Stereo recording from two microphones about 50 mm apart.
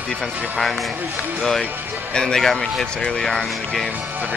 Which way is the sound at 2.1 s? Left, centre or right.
Centre.